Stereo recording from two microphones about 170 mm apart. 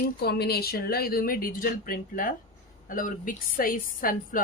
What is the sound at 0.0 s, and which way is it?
Speech, 70° left (ahead or behind).